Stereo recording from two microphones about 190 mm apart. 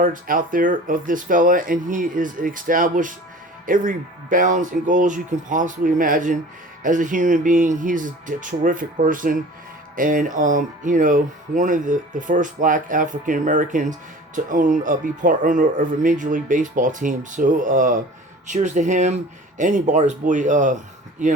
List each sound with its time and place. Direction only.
0.0 s speech: 45° right (ahead or behind)